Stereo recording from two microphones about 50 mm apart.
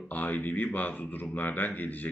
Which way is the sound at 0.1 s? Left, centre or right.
Left.